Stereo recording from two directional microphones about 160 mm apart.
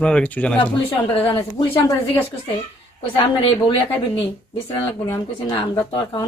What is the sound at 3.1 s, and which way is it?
Speech, 30° left (ahead or behind).